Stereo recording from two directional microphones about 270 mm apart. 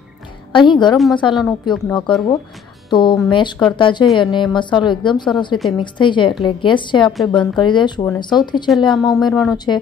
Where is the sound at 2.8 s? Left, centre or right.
Centre.